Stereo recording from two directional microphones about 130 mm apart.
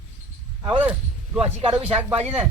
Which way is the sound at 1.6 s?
45° right (ahead or behind).